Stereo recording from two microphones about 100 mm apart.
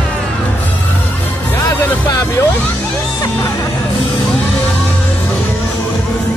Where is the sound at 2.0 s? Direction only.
40° left (ahead or behind).